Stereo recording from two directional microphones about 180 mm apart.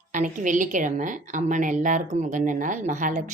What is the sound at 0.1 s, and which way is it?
A woman's voice, 45° right (ahead or behind).